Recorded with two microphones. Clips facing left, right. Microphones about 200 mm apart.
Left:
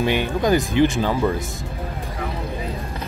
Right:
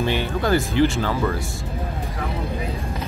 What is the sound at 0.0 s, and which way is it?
Speech, 15° left (ahead or behind).